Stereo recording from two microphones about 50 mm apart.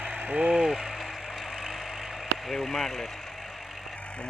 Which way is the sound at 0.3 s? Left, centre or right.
Centre.